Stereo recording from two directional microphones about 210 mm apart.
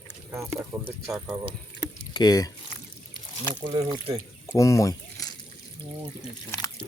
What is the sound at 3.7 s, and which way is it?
Speech, 25° right (ahead or behind).